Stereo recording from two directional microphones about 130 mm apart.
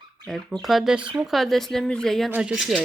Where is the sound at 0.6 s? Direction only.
Centre (ahead or behind).